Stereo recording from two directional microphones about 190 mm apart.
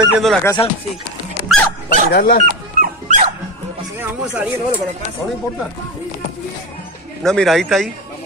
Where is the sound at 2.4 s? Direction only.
45° right (ahead or behind).